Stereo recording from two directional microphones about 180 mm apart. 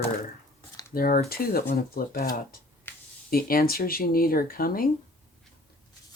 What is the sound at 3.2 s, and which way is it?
Speech, 55° left (ahead or behind).